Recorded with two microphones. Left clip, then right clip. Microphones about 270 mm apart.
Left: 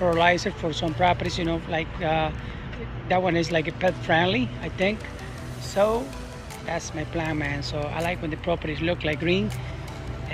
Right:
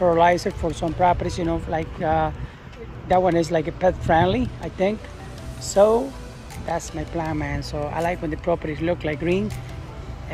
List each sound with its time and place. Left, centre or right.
0.0 s speech: centre
5.8 s speech: right
6.7 s speech: centre